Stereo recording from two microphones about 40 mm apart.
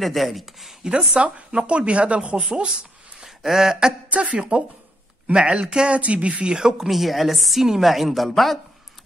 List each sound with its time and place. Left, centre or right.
0.0 s a woman's voice: centre
0.8 s speech: centre
1.2 s speech: right
2.5 s a sound: right
3.3 s a sound: centre
4.1 s speech: right
5.9 s speech: right
6.9 s a woman's voice: centre